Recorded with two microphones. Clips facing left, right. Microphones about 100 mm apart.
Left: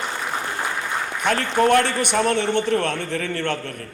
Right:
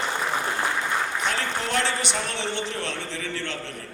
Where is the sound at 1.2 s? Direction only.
55° left (ahead or behind).